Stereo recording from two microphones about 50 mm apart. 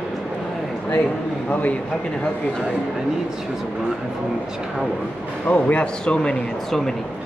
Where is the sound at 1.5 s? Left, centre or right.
Left.